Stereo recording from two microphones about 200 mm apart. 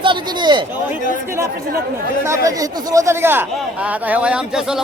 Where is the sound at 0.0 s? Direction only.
25° right (ahead or behind).